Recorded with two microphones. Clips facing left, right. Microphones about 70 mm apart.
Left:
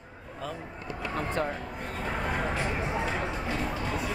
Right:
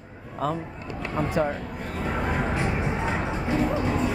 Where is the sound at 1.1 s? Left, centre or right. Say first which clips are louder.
Right 6 dB; centre.